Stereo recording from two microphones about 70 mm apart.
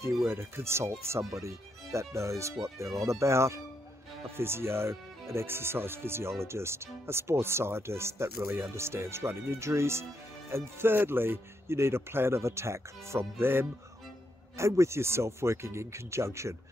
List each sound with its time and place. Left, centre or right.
0.3 s speech: right